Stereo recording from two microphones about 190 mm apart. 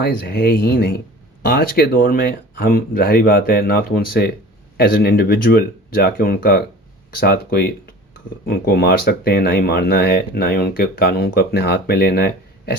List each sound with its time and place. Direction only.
0.0 s speech: 50° left (ahead or behind)